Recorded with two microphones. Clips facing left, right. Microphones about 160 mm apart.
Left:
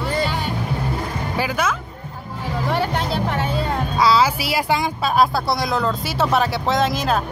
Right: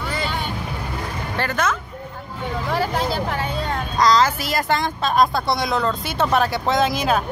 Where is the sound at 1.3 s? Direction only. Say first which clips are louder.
Even; 5° left (ahead or behind).